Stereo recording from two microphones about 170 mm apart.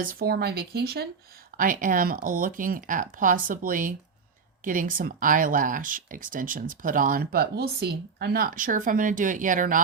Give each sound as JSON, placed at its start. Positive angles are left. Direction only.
{"t": 0.0, "sound": "speech", "side_deg": -60}
{"t": 1.5, "sound": "speech", "side_deg": -55}